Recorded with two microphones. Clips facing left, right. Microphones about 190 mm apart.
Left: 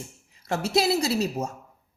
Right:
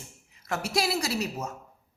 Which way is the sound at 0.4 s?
25° left (ahead or behind).